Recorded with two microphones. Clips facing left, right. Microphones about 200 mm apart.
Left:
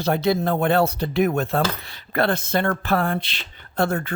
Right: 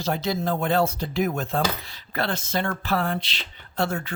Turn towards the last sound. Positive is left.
turn(degrees=55)  # may be behind; listen again after turning